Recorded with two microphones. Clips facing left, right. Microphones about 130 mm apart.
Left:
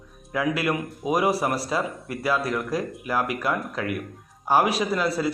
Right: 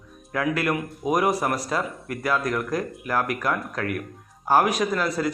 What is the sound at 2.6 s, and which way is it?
Speech, 10° left (ahead or behind).